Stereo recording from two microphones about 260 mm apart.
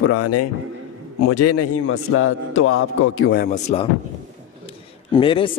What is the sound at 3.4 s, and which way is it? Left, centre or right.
Speech, left.